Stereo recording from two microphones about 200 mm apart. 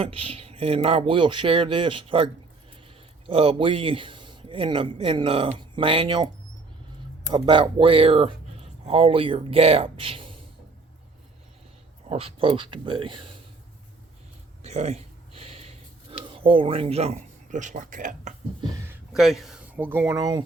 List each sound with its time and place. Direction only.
0.0 s speech: 30° right (ahead or behind)
12.0 s speech: 30° right (ahead or behind)
14.6 s a sound: 35° right (ahead or behind)
18.9 s speech: centre (ahead or behind); by 20.4 s 20° right (ahead or behind)